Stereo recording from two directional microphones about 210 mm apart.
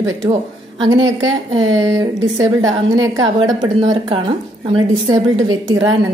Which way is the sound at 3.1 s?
20° right (ahead or behind).